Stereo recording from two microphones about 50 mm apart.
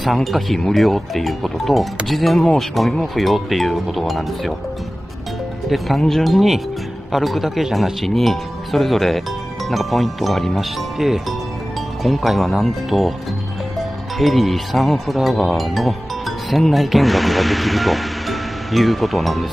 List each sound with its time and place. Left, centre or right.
0.0 s speech: centre
5.7 s speech: centre